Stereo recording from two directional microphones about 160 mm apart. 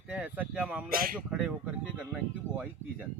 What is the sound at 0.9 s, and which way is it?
Speech, 60° right (ahead or behind).